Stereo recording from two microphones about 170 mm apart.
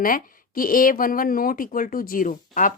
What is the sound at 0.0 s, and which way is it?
Speech, 55° left (ahead or behind).